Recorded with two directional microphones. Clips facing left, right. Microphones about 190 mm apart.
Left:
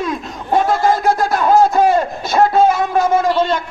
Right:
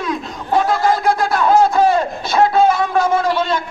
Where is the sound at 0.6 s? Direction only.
40° left (ahead or behind).